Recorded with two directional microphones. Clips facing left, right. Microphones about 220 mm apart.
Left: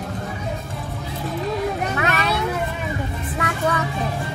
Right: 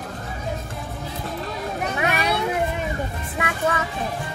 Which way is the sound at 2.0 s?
15° right (ahead or behind).